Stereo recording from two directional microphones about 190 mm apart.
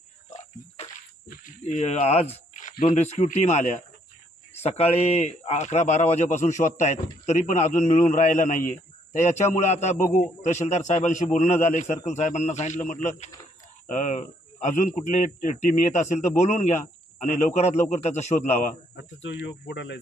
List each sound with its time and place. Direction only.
0.3 s a sound: 35° left (ahead or behind)
2.8 s speech: 35° left (ahead or behind)
18.9 s speech: 70° left (ahead or behind)